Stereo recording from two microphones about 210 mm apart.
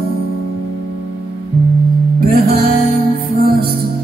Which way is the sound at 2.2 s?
45° right (ahead or behind).